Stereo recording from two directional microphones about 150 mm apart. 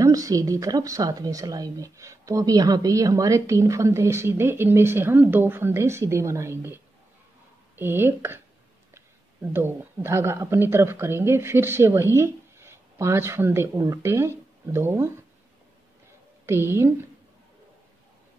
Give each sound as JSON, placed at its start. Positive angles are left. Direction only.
{"t": 0.0, "sound": "a woman's voice", "side_deg": -20}
{"t": 16.4, "sound": "a woman's voice", "side_deg": -15}